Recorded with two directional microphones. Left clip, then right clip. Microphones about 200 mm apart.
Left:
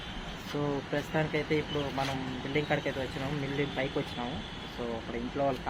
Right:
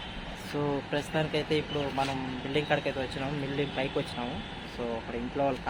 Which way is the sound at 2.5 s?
15° right (ahead or behind).